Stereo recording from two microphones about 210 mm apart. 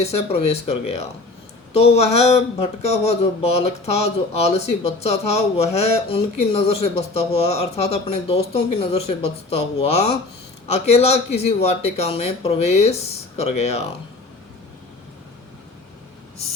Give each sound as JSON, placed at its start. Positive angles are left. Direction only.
{"t": 0.0, "sound": "speech", "side_deg": 30}